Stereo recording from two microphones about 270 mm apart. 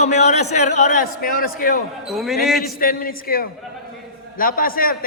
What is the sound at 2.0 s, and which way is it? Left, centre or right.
Speech, centre.